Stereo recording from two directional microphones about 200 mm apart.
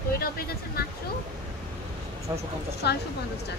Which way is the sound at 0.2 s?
50° left (ahead or behind).